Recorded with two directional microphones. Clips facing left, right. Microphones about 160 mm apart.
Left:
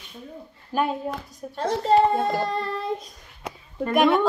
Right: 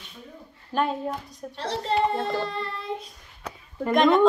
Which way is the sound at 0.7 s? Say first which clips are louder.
Left 1 dB; 5° left (ahead or behind).